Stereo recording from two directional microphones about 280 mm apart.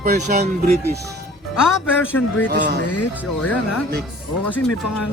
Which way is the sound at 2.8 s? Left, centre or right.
Left.